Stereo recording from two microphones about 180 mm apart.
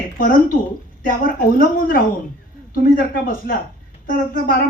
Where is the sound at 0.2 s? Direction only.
50° left (ahead or behind).